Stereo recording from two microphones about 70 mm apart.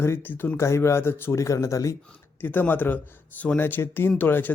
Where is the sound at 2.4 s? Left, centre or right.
Left.